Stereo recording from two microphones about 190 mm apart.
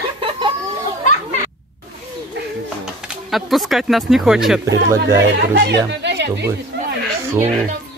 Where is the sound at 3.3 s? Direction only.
Centre (ahead or behind).